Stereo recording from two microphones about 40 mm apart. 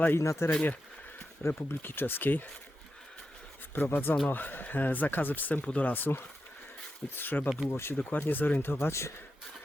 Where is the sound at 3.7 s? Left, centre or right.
Left.